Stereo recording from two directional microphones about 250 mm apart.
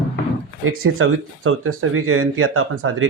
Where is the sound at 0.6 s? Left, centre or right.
Right.